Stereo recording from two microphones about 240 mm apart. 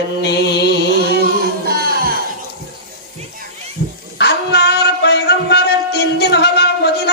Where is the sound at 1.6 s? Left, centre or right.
Right.